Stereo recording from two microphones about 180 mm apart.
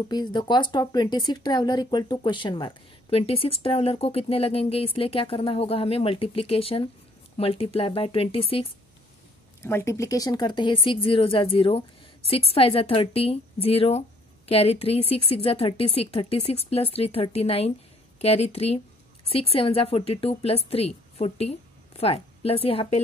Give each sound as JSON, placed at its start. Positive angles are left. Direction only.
{"t": 0.1, "sound": "speech", "side_deg": 25}
{"t": 9.6, "sound": "a woman's voice", "side_deg": 15}